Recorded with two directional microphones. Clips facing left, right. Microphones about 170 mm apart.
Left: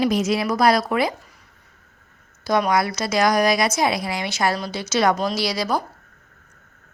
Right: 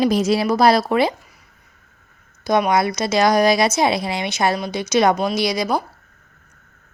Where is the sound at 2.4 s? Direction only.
20° right (ahead or behind).